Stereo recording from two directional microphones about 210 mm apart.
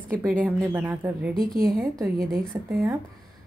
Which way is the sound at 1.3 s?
45° right (ahead or behind).